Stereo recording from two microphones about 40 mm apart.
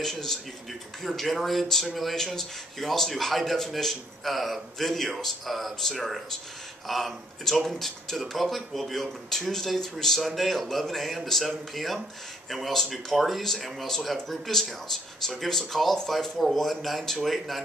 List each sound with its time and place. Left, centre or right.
0.0 s speech: centre